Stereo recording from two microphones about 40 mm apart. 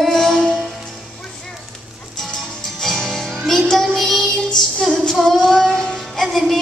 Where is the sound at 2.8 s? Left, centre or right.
Centre.